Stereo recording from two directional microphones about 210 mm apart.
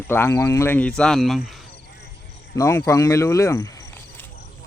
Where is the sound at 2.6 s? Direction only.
15° left (ahead or behind).